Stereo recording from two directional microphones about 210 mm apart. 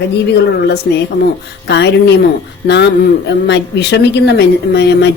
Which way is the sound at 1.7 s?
55° left (ahead or behind).